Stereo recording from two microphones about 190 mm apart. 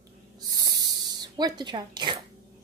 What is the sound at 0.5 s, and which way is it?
Spray, 20° right (ahead or behind).